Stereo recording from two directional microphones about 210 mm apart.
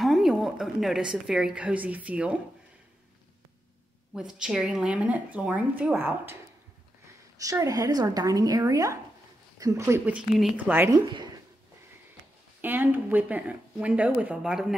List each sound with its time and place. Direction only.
0.0 s a woman's voice: centre (ahead or behind)
4.1 s a woman's voice: 5° right (ahead or behind)
7.3 s speech: 15° right (ahead or behind)
12.6 s speech: 10° right (ahead or behind)